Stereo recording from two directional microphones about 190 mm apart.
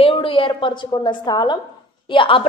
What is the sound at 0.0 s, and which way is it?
A woman's voice, 30° left (ahead or behind).